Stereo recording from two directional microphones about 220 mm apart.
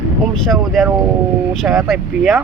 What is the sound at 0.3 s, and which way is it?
Speech, centre (ahead or behind).